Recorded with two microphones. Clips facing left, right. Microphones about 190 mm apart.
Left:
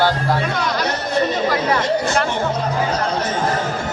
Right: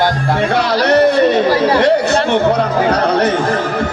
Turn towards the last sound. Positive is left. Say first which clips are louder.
# right 7 dB
turn(degrees=-65)  # may be behind; listen again after turning